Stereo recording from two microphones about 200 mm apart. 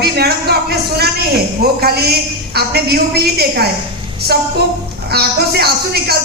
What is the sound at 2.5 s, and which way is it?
A man's voice, 50° right (ahead or behind).